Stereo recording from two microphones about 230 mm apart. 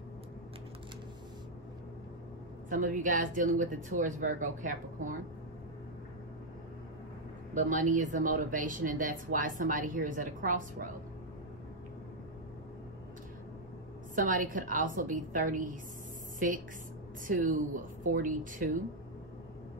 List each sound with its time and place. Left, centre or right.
2.7 s speech: right
7.5 s speech: right
14.1 s speech: right